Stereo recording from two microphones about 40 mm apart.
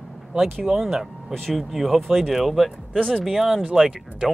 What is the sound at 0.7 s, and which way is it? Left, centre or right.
Speech, centre.